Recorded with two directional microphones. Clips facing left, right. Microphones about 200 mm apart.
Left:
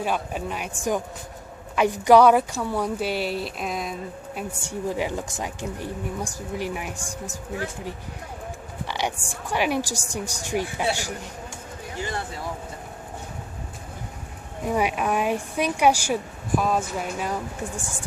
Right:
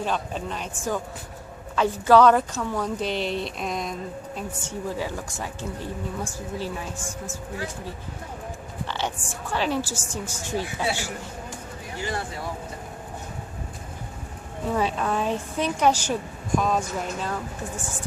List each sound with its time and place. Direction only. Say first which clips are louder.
0.0 s a woman's voice: left 1 dB; 10° left (ahead or behind)
4.4 s a woman's voice: left 4 dB; 15° left (ahead or behind)
8.9 s a woman's voice: left 2 dB; 15° left (ahead or behind)
14.6 s a woman's voice: left 1 dB; 15° left (ahead or behind)